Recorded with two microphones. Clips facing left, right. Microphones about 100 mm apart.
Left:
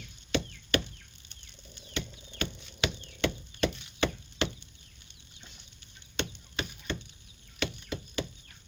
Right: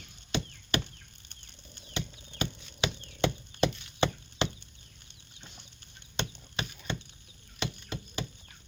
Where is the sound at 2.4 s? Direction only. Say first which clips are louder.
Even; 20° right (ahead or behind).